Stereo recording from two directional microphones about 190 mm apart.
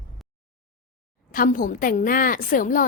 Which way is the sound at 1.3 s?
45° left (ahead or behind).